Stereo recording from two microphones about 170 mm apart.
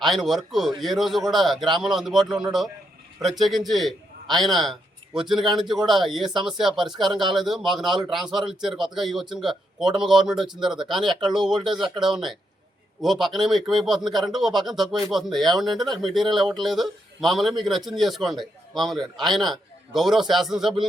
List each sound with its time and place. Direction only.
0.0 s a man's voice: centre (ahead or behind)
8.3 s speech: 25° right (ahead or behind)
8.6 s a man's voice: centre (ahead or behind)